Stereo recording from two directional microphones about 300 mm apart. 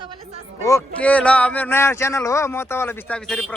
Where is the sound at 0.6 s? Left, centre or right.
Centre.